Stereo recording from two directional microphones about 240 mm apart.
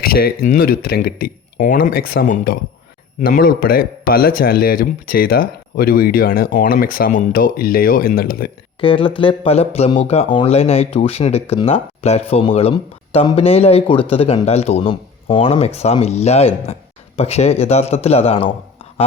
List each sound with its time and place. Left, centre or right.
0.0 s speech: left
8.8 s speech: left